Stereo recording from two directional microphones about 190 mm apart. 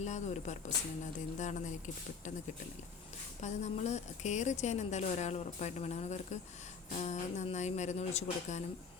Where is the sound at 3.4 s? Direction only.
35° left (ahead or behind).